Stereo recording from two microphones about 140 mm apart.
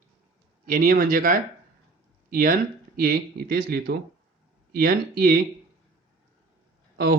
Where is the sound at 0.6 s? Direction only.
85° right.